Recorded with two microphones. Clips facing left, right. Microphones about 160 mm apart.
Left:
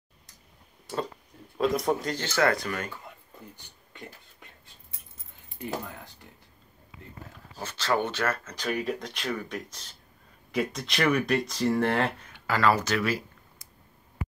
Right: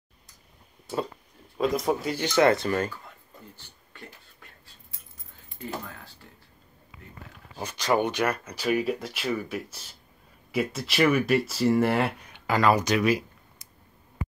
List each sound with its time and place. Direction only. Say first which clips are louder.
1.6 s speech: even; centre (ahead or behind); by 2.9 s 30° right (ahead or behind)
3.5 s a sound: left 1 dB; 15° left (ahead or behind)
5.6 s keys jangling: left 2 dB; 15° left (ahead or behind)
7.5 s speech: right 3 dB; 15° right (ahead or behind)